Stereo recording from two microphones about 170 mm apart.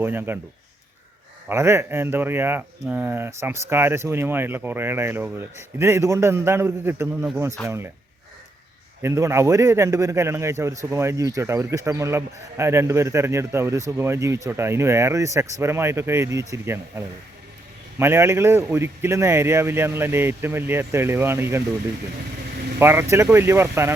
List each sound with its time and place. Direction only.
0.0 s a man's voice: 15° right (ahead or behind)
1.5 s a man's voice: 15° right (ahead or behind)
9.0 s a man's voice: 15° right (ahead or behind)
18.0 s a man's voice: 15° right (ahead or behind)
22.8 s a man's voice: 15° right (ahead or behind)